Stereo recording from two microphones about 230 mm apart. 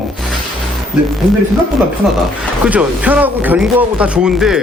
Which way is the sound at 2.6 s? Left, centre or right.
Centre.